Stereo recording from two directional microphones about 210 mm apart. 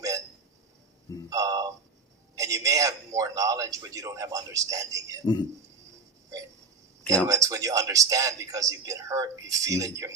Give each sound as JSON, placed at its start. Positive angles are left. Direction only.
{"t": 1.3, "sound": "a sound", "side_deg": -15}
{"t": 2.3, "sound": "a man's voice", "side_deg": -15}
{"t": 5.2, "sound": "a man's voice", "side_deg": 20}
{"t": 7.3, "sound": "a man's voice", "side_deg": -15}